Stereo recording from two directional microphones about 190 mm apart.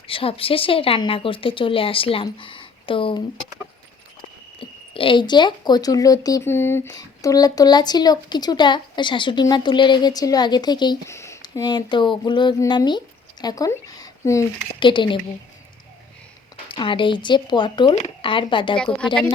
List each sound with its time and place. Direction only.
0.1 s speech: 30° left (ahead or behind)
4.6 s speech: 25° left (ahead or behind)
16.6 s speech: 25° left (ahead or behind)
18.8 s speech: 5° left (ahead or behind)